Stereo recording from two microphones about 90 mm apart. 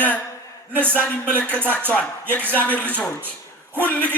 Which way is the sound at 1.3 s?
15° left (ahead or behind).